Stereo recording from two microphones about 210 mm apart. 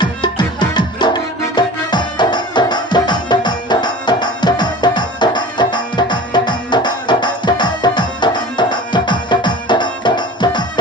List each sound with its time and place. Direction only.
0.0 s music: 20° left (ahead or behind)